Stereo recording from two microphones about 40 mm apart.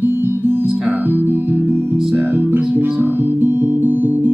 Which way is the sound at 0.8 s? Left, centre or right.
Right.